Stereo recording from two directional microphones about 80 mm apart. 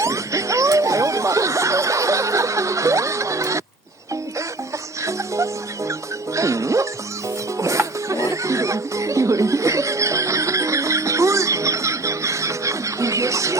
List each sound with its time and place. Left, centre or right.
0.0 s snicker: right
5.0 s music: right